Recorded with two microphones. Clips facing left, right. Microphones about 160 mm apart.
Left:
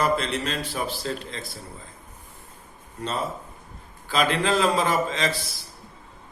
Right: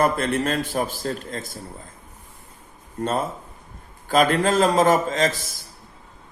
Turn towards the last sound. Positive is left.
turn(degrees=-45)  # may be behind; listen again after turning